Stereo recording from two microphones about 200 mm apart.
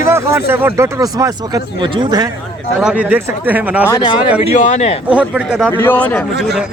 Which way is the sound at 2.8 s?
5° right (ahead or behind).